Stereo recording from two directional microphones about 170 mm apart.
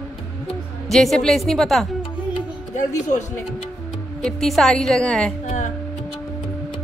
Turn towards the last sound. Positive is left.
turn(degrees=45)  # may be behind; listen again after turning